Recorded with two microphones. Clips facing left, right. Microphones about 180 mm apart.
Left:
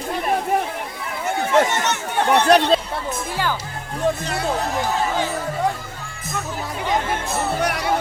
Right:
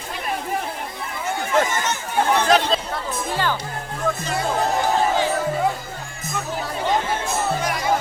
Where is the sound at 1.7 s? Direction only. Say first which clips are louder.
Left 1 dB; 70° left (ahead or behind).